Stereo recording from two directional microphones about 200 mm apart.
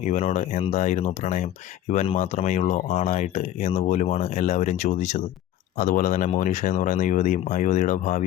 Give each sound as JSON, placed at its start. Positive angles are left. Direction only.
{"t": 0.0, "sound": "speech", "side_deg": 35}